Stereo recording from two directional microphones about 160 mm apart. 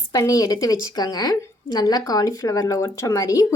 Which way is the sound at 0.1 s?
20° left (ahead or behind).